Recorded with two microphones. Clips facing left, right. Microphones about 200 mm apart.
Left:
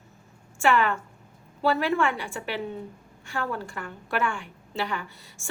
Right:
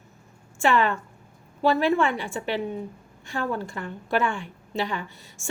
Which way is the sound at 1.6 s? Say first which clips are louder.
Right 3 dB; 20° right (ahead or behind).